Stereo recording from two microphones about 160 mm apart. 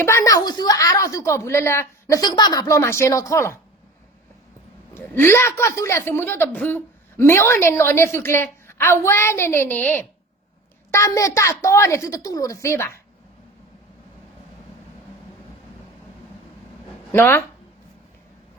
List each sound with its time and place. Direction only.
0.0 s a woman's voice: 15° left (ahead or behind)
4.9 s a woman's voice: 15° left (ahead or behind)
17.1 s a woman's voice: 15° left (ahead or behind)